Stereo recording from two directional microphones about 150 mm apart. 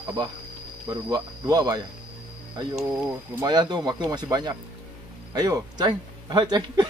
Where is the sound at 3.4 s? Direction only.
30° right (ahead or behind).